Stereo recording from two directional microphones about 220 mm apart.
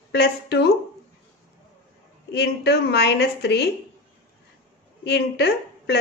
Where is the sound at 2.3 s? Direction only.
50° left (ahead or behind).